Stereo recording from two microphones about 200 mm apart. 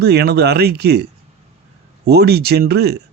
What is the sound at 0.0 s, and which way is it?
Speech, 55° right (ahead or behind).